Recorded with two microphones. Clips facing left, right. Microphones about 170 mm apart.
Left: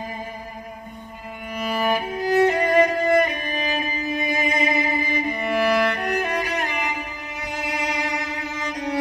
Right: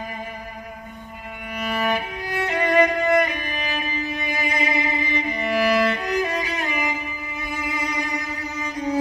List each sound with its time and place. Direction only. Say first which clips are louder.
1.9 s violin: left 4 dB; 40° left (ahead or behind); by 8.9 s 90° left